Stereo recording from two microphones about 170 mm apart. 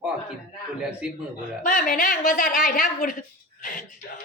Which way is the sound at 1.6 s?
50° left (ahead or behind).